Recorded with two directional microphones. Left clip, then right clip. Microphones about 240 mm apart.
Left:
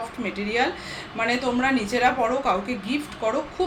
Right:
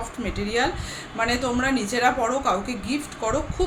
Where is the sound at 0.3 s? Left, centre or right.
Centre.